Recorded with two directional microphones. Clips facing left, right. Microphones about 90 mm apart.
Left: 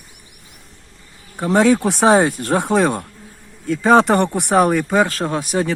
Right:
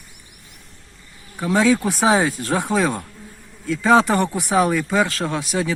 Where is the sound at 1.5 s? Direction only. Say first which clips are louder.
Left 3 dB; 55° left (ahead or behind).